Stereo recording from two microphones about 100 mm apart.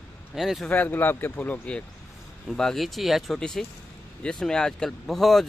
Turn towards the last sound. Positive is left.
turn(degrees=0)  # may be behind; listen again after turning